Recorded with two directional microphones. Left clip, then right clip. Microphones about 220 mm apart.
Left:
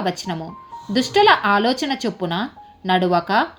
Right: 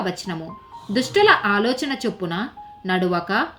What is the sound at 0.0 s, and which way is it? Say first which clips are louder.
Speech: left 3 dB; 25° left (ahead or behind).